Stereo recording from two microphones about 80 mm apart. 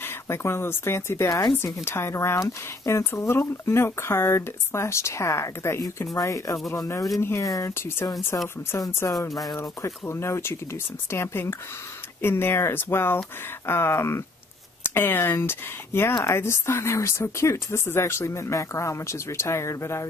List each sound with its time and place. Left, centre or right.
0.0 s speech: left
7.2 s speech: left
8.7 s speech: left